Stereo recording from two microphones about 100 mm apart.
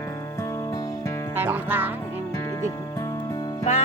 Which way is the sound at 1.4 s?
20° right (ahead or behind).